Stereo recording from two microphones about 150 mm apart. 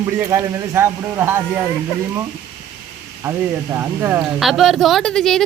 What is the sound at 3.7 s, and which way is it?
Speech, 15° right (ahead or behind).